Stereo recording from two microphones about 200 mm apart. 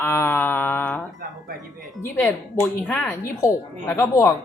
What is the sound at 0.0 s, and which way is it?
Mantra, 10° left (ahead or behind).